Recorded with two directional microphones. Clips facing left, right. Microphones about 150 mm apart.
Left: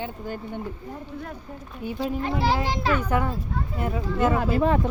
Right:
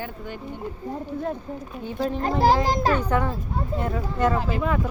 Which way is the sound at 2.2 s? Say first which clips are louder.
Right 6 dB; 45° right (ahead or behind).